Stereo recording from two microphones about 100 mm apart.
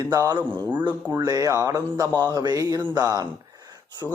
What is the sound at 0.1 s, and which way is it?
Speech, 40° right (ahead or behind).